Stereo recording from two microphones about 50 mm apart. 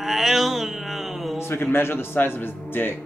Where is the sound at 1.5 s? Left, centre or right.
Left.